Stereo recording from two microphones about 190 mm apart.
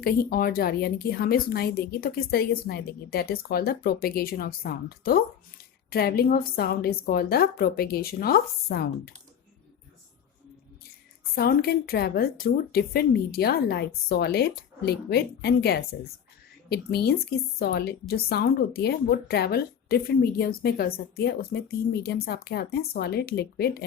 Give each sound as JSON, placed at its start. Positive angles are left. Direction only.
{"t": 0.0, "sound": "a woman's voice", "side_deg": 50}
{"t": 11.3, "sound": "a woman's voice", "side_deg": 55}